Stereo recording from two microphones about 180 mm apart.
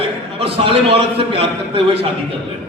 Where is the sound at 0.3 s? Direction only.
30° right (ahead or behind).